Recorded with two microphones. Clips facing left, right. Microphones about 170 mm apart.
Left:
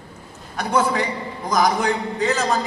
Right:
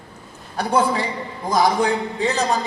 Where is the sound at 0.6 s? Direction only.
30° right (ahead or behind).